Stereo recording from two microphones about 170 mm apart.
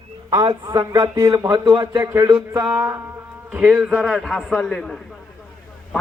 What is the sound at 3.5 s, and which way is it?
A man's voice, 5° right (ahead or behind).